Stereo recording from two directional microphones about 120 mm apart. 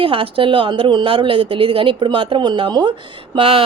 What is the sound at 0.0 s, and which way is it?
Speech, 45° right (ahead or behind).